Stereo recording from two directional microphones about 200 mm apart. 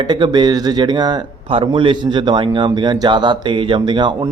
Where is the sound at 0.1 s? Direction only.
20° right (ahead or behind).